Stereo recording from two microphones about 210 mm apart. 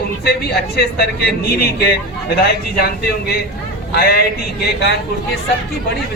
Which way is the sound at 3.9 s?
50° left (ahead or behind).